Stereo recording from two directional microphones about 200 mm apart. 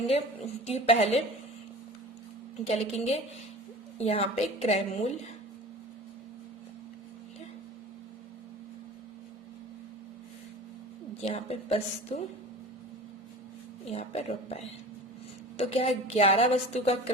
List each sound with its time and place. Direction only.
0.1 s a woman's voice: 30° left (ahead or behind)
2.6 s a woman's voice: 30° left (ahead or behind)
11.2 s a woman's voice: 30° left (ahead or behind)
13.9 s a woman's voice: 30° left (ahead or behind)